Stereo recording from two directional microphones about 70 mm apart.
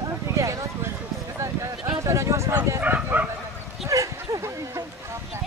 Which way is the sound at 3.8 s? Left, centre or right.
Right.